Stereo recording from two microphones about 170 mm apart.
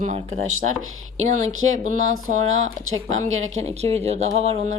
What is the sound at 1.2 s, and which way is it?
Speech, 45° right (ahead or behind).